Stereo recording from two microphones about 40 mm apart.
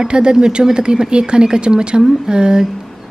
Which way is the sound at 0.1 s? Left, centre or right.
Right.